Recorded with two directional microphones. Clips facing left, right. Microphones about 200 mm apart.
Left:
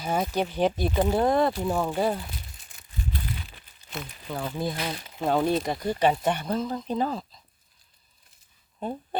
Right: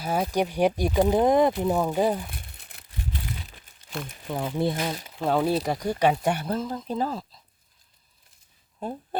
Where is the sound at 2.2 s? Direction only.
55° right (ahead or behind).